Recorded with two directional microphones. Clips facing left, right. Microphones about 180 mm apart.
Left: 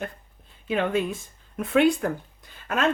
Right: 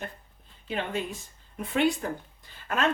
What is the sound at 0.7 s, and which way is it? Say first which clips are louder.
Speech: left 7 dB; 60° left (ahead or behind).